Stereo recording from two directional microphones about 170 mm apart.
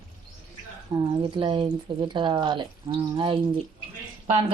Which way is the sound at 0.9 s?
30° right (ahead or behind).